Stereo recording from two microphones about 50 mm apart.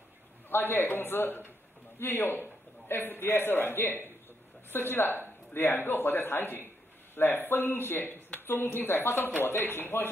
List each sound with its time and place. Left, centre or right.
0.5 s speech: left